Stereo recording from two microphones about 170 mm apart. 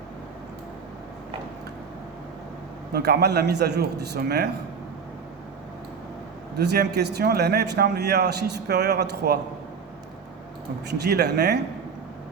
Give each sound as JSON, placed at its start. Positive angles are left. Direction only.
{"t": 2.9, "sound": "a man's voice", "side_deg": -70}
{"t": 6.6, "sound": "a man's voice", "side_deg": -75}
{"t": 10.8, "sound": "a man's voice", "side_deg": -75}